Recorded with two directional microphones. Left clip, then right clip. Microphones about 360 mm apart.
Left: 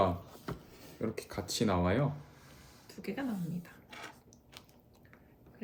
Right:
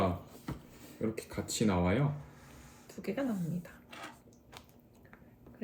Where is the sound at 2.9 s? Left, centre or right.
Centre.